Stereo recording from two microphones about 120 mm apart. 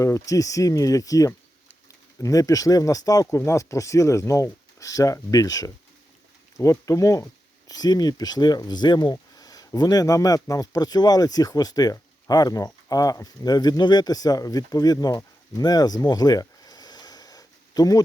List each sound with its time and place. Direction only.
0.0 s speech: 25° left (ahead or behind)